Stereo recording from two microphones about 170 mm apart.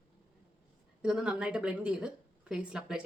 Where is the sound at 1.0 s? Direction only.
5° right (ahead or behind).